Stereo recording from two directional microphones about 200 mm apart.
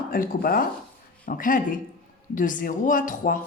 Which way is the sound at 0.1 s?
45° left (ahead or behind).